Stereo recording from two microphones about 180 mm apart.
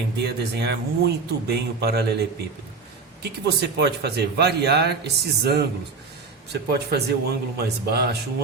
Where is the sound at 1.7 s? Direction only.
65° right (ahead or behind).